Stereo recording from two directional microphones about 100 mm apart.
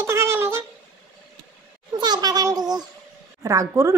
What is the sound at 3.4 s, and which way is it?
Speech, 30° right (ahead or behind).